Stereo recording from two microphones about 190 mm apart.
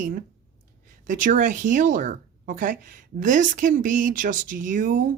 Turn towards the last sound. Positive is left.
turn(degrees=-40)  # may be behind; listen again after turning